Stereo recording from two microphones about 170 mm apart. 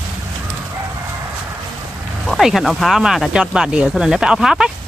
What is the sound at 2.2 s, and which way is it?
Speech, centre (ahead or behind).